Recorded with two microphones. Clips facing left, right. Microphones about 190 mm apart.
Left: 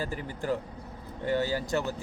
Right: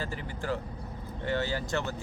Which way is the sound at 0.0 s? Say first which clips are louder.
Left 2 dB; 15° left (ahead or behind).